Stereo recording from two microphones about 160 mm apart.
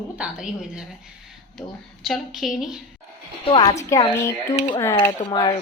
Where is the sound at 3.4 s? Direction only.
35° left (ahead or behind).